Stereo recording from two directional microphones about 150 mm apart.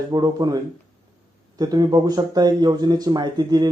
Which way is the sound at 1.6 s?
25° right (ahead or behind).